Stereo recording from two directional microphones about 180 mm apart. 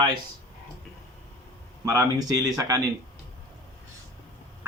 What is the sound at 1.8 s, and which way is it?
Speech, 20° right (ahead or behind).